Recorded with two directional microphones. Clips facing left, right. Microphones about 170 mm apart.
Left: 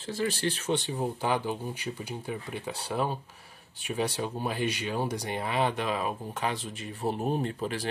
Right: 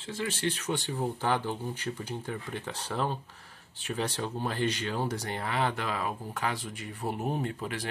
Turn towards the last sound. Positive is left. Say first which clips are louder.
# left 3 dB
turn(degrees=30)  # may be behind; listen again after turning